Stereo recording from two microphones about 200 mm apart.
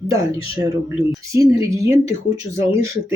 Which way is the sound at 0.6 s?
15° right (ahead or behind).